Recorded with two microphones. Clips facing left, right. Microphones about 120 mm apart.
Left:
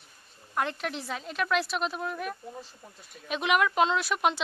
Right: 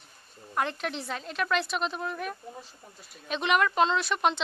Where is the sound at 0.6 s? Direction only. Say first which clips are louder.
Even; centre (ahead or behind).